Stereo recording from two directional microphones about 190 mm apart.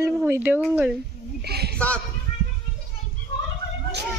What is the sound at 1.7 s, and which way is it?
Speech, 5° left (ahead or behind).